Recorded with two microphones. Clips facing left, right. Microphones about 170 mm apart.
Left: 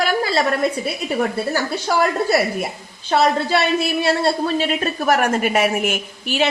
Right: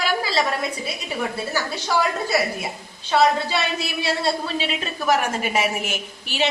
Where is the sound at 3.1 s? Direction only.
50° left (ahead or behind).